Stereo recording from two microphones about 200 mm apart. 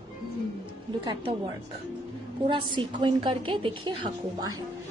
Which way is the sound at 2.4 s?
25° right (ahead or behind).